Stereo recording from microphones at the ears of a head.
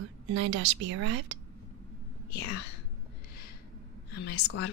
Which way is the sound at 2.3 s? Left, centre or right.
Left.